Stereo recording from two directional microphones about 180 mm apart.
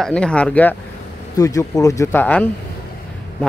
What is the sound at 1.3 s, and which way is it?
Speech, 20° left (ahead or behind).